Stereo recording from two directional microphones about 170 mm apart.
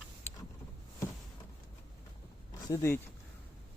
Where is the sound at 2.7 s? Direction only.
15° left (ahead or behind).